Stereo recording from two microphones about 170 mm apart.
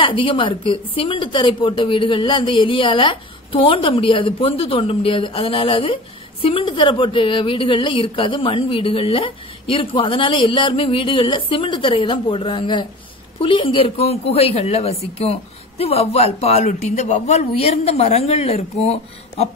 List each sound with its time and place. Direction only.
0.0 s a woman's voice: 30° left (ahead or behind)